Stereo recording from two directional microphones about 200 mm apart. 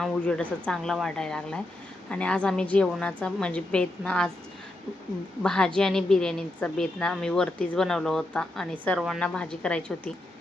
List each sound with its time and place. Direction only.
0.0 s a woman's voice: 5° left (ahead or behind)
5.4 s a woman's voice: 5° left (ahead or behind)